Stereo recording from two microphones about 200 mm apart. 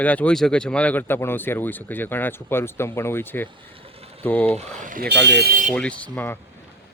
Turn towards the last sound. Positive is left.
turn(degrees=10)  # may be behind; listen again after turning